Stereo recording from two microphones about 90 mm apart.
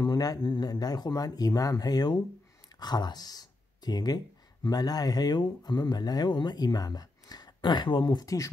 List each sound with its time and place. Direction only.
0.0 s speech: 50° left (ahead or behind)
8.2 s speech: 40° left (ahead or behind)